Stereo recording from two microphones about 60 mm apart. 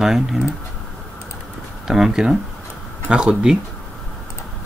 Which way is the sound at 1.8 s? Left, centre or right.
Centre.